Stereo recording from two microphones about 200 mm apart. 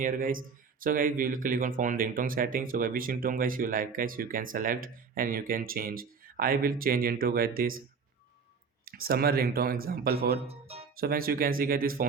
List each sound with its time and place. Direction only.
0.0 s speech: 45° right (ahead or behind)
8.8 s speech: 50° right (ahead or behind)
10.4 s speech: 30° right (ahead or behind)
10.9 s speech: 45° right (ahead or behind)